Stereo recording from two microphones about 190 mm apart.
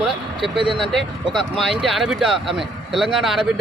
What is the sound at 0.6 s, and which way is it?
Speech, 25° right (ahead or behind).